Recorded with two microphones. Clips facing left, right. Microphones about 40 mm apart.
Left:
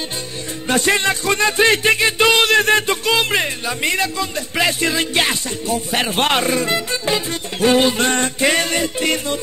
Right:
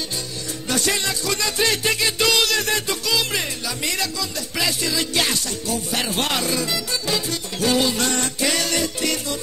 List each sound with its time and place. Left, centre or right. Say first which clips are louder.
0.7 s music: left 7 dB; left